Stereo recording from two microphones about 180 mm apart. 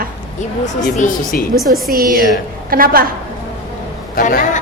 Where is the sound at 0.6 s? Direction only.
45° left (ahead or behind).